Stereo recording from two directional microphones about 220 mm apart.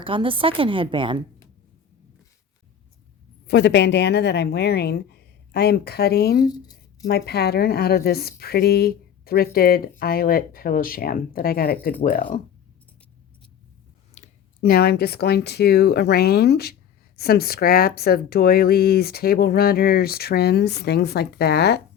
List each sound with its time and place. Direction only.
0.0 s a woman's voice: 25° right (ahead or behind)
3.4 s speech: 50° left (ahead or behind)
14.2 s a sound: 30° left (ahead or behind)
14.6 s speech: 45° left (ahead or behind)